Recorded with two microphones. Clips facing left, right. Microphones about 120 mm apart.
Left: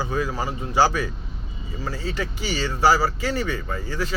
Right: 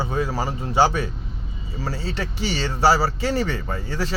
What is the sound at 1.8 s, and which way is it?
Speech, 35° right (ahead or behind).